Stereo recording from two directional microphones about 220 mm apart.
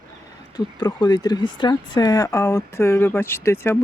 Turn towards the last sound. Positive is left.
turn(degrees=10)  # may be behind; listen again after turning